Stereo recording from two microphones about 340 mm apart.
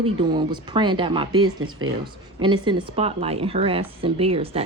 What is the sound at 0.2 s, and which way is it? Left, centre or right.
A woman's voice, centre.